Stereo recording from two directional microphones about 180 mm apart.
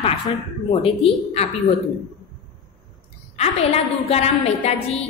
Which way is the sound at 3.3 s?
35° left (ahead or behind).